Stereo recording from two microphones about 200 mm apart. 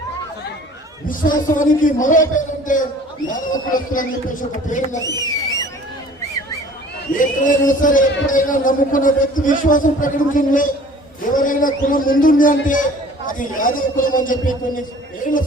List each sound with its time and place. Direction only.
1.0 s a man's voice: 45° left (ahead or behind)
5.0 s speech: 20° right (ahead or behind)
7.2 s a man's voice: 40° left (ahead or behind)